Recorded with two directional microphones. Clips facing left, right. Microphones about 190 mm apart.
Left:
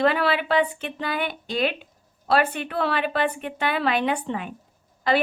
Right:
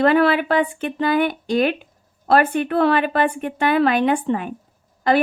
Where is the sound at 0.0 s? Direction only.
50° right (ahead or behind).